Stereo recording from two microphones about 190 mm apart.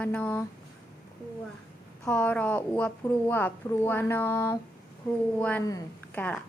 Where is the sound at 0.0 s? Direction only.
5° left (ahead or behind).